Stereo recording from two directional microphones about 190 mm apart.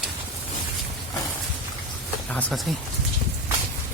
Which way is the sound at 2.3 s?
5° left (ahead or behind).